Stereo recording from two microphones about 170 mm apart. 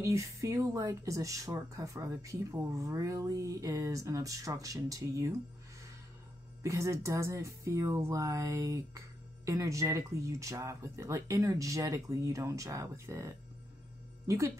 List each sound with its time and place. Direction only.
0.0 s speech: 15° right (ahead or behind)
6.6 s speech: 20° right (ahead or behind)